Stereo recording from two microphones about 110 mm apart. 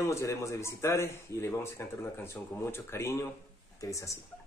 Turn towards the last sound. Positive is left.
turn(degrees=30)  # may be behind; listen again after turning